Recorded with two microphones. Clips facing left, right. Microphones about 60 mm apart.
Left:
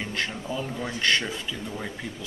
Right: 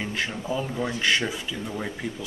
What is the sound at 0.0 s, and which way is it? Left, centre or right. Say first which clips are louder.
Speech: right 1 dB; centre.